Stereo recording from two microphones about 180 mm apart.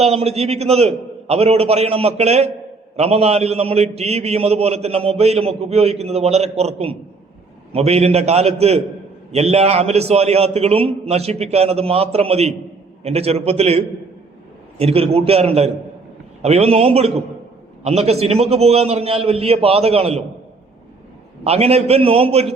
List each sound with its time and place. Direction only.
0.0 s a man's voice: 35° right (ahead or behind)
21.4 s a man's voice: 35° right (ahead or behind)